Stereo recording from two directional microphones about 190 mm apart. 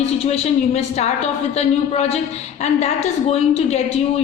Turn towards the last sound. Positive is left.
turn(degrees=35)  # may be behind; listen again after turning